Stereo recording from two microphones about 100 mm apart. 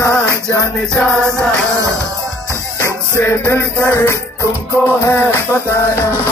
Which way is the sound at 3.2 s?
25° left (ahead or behind).